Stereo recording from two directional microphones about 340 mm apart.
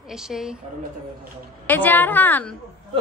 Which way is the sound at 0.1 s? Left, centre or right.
Centre.